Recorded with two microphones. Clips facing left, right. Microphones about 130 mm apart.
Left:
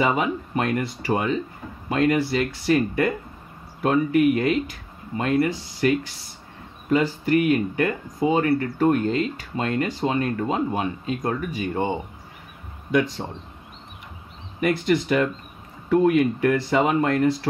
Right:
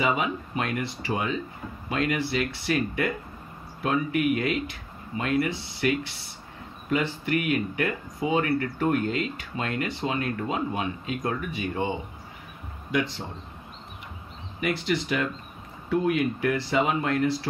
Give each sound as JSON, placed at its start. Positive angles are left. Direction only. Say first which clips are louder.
{"t": 0.0, "sound": "speech", "louder": "left 4 dB", "side_deg": 40}
{"t": 14.6, "sound": "speech", "louder": "left 6 dB", "side_deg": 50}